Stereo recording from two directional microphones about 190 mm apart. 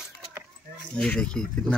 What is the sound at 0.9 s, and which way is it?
Speech, 5° left (ahead or behind).